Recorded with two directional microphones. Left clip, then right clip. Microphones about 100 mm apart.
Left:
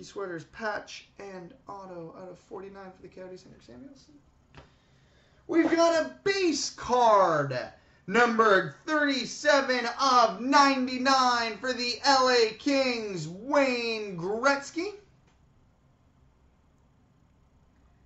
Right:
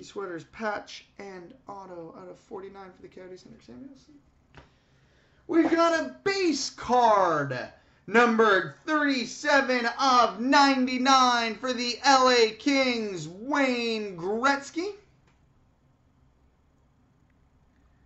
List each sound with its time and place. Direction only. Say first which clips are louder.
0.0 s speech: right 1 dB; 40° right (ahead or behind)
5.5 s speech: right 1 dB; 30° right (ahead or behind)